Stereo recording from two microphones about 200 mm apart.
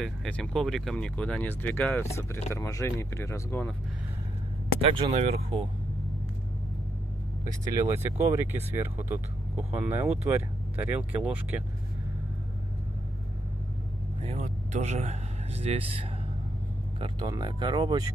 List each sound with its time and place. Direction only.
0.0 s speech: centre (ahead or behind)
4.9 s speech: 30° right (ahead or behind)
7.9 s speech: 15° right (ahead or behind)
14.2 s speech: 30° right (ahead or behind)